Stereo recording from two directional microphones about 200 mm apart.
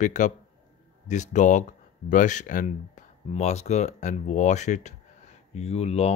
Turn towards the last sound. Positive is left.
turn(degrees=30)  # may be behind; listen again after turning